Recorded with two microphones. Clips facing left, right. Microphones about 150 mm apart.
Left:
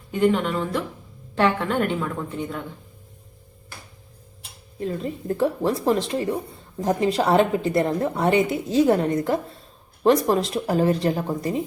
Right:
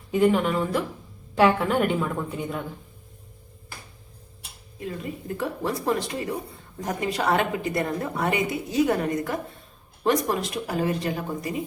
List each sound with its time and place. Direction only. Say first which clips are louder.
0.1 s a woman's voice: even; 5° right (ahead or behind)
5.3 s a woman's voice: left 7 dB; 30° left (ahead or behind)